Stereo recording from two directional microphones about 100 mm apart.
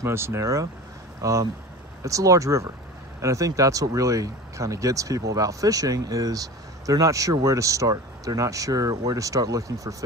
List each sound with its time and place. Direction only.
0.0 s speech: 25° right (ahead or behind)